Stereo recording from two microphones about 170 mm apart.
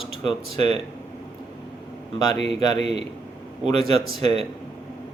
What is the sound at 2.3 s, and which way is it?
Speech, 35° right (ahead or behind).